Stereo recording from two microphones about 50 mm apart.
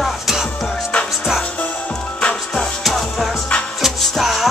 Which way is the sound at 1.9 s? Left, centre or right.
Centre.